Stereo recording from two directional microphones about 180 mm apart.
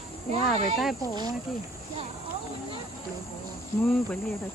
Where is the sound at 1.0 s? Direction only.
20° right (ahead or behind).